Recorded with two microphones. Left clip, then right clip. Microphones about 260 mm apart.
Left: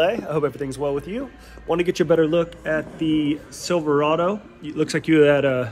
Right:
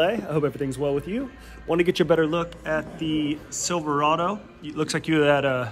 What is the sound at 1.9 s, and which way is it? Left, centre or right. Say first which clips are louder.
Speech: left 5 dB; right.